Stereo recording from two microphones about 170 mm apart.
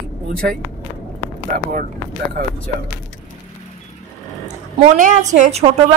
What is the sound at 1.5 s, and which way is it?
Speech, 65° right (ahead or behind).